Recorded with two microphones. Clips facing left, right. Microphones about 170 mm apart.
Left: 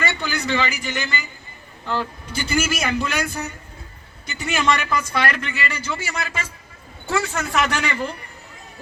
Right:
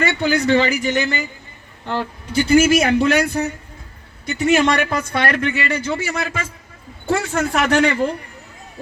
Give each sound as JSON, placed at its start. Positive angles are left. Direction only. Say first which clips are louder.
{"t": 0.2, "sound": "a man's voice", "louder": "right 8 dB", "side_deg": -55}
{"t": 2.3, "sound": "a man's voice", "louder": "right 10 dB", "side_deg": -55}